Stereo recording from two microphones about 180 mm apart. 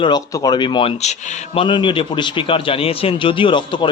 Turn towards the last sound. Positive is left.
turn(degrees=25)  # may be behind; listen again after turning